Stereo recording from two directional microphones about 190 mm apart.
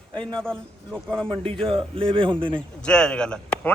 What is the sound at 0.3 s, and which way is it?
A man's voice, 5° left (ahead or behind).